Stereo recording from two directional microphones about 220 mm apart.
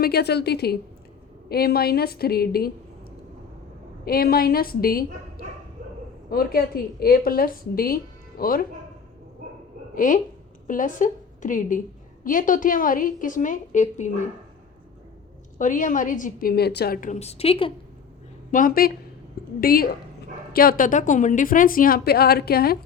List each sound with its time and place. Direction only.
0.0 s a woman's voice: 45° left (ahead or behind)
4.0 s a woman's voice: 45° left (ahead or behind)
6.3 s a woman's voice: 45° left (ahead or behind)
9.9 s a woman's voice: 35° left (ahead or behind)
15.5 s a woman's voice: 35° left (ahead or behind)
18.5 s a woman's voice: 40° left (ahead or behind)